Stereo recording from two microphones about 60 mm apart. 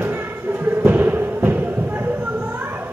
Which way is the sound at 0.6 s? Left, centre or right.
Right.